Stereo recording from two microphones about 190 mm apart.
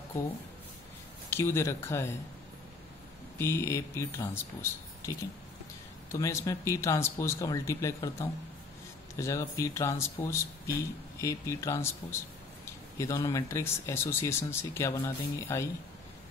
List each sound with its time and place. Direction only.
1.3 s speech: 15° left (ahead or behind)
3.3 s speech: 15° left (ahead or behind)
6.1 s speech: 15° left (ahead or behind)